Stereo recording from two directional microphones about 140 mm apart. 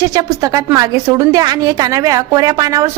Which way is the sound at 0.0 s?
25° right (ahead or behind).